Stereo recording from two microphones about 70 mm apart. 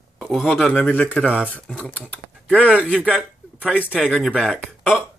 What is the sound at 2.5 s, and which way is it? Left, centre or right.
Speech, centre.